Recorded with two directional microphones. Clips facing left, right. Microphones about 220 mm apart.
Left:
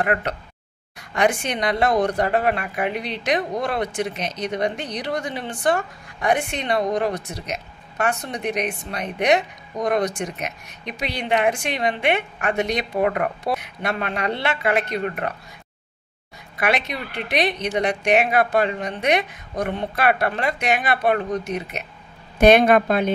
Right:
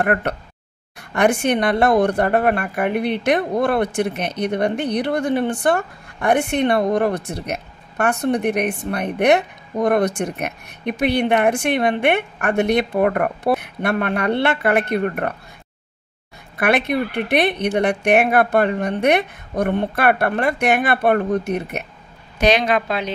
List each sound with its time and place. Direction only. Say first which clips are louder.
0.0 s a woman's voice: right 3 dB; 55° right (ahead or behind)
16.5 s a woman's voice: right 5 dB; 55° right (ahead or behind)
22.4 s a woman's voice: left 4 dB; 55° left (ahead or behind)